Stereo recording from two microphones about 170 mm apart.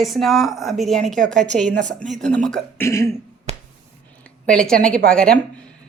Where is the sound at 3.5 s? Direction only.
40° right (ahead or behind).